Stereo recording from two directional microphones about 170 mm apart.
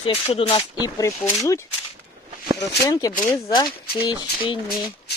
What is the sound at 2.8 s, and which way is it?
Speech, 25° left (ahead or behind).